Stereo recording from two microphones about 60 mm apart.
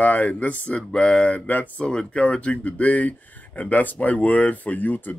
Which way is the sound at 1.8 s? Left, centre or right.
Centre.